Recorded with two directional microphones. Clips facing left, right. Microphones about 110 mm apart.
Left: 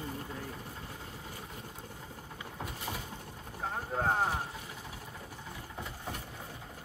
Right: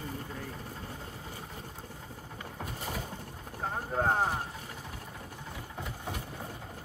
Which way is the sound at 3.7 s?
10° right (ahead or behind).